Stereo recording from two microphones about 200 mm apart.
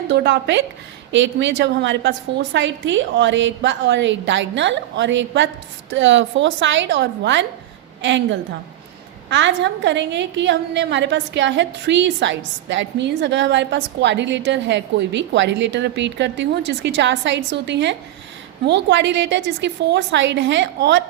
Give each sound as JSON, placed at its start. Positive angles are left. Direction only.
{"t": 0.1, "sound": "a woman's voice", "side_deg": -60}